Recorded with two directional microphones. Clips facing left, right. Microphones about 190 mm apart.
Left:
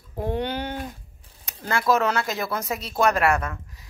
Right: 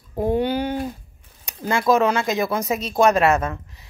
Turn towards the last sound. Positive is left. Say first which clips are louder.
# right 4 dB
turn(degrees=-25)  # may be behind; listen again after turning